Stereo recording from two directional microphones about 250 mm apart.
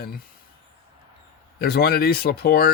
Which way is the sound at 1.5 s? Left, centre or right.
Left.